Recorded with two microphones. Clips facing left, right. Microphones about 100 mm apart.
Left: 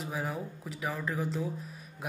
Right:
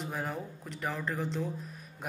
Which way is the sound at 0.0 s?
5° left (ahead or behind).